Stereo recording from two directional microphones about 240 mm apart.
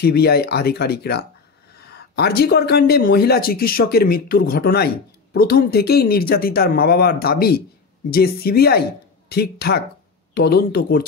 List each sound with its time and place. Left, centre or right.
0.0 s speech: left